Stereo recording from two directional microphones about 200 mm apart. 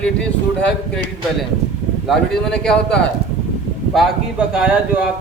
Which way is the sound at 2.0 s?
5° left (ahead or behind).